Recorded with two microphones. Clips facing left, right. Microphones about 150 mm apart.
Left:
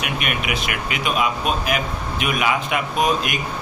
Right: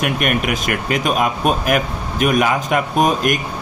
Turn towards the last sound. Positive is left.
turn(degrees=-45)  # may be behind; listen again after turning